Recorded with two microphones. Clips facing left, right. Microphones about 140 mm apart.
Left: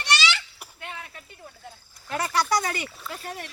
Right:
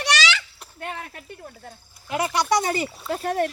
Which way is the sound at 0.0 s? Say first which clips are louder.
Right 3 dB; 90° right.